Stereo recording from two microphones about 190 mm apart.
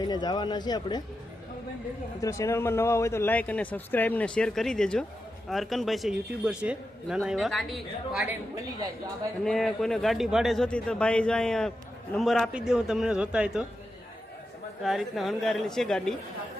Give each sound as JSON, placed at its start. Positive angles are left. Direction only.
{"t": 0.1, "sound": "speech", "side_deg": 20}
{"t": 2.2, "sound": "speech", "side_deg": 15}
{"t": 9.4, "sound": "speech", "side_deg": 0}
{"t": 14.8, "sound": "speech", "side_deg": 0}